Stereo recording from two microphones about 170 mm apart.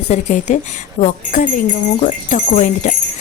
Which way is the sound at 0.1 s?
45° left (ahead or behind).